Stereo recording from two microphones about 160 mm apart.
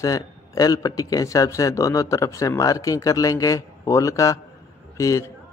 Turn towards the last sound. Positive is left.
turn(degrees=20)  # may be behind; listen again after turning